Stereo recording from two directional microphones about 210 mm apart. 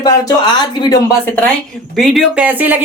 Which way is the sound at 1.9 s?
Centre (ahead or behind).